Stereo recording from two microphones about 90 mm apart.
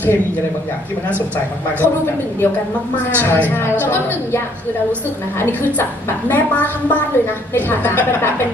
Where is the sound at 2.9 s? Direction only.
20° left (ahead or behind).